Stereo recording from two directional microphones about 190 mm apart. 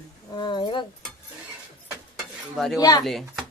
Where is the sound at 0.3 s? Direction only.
25° left (ahead or behind).